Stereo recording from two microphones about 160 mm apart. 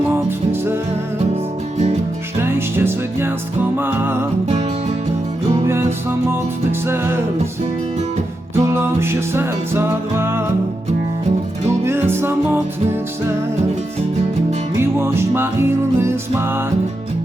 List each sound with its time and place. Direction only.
0.1 s music: 15° right (ahead or behind)
2.4 s music: 15° right (ahead or behind)
5.6 s music: 15° right (ahead or behind)
8.5 s music: 15° right (ahead or behind)
11.9 s music: 15° right (ahead or behind)
14.8 s music: 15° right (ahead or behind)